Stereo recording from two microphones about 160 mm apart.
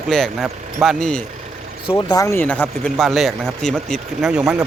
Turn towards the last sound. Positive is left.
turn(degrees=-5)  # may be behind; listen again after turning